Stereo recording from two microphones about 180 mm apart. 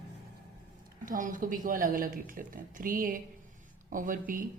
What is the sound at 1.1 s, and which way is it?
A woman's voice, 45° right (ahead or behind).